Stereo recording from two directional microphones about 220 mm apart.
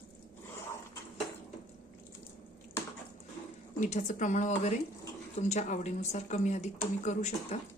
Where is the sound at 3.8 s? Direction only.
35° left (ahead or behind).